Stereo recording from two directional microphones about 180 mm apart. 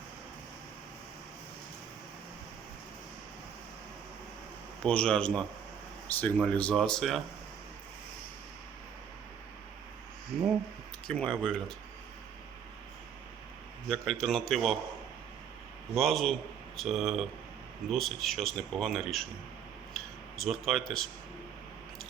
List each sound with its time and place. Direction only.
4.8 s speech: 5° left (ahead or behind)
11.1 s speech: 5° left (ahead or behind)
13.9 s speech: centre (ahead or behind)
16.0 s speech: centre (ahead or behind)